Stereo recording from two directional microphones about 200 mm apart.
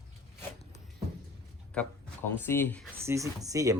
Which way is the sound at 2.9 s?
15° right (ahead or behind).